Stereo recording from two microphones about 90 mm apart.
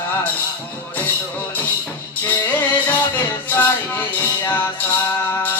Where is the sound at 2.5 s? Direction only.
20° left (ahead or behind).